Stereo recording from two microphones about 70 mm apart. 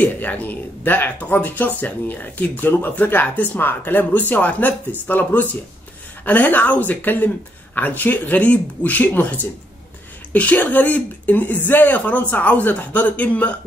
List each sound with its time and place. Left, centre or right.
0.0 s speech: left